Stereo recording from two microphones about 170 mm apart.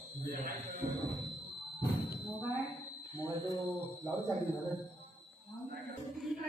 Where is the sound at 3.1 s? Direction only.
20° left (ahead or behind).